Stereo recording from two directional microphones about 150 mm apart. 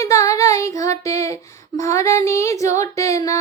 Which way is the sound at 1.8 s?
20° left (ahead or behind).